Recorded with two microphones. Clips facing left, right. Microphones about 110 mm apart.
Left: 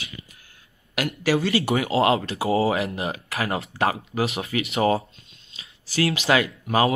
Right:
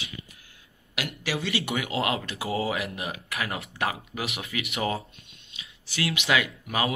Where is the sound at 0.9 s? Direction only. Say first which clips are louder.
Left 9 dB; 45° left (ahead or behind).